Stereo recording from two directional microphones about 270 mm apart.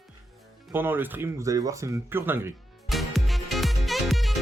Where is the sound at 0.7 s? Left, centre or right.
Centre.